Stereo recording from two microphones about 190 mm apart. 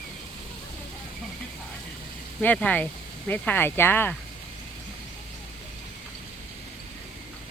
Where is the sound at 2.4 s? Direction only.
10° left (ahead or behind).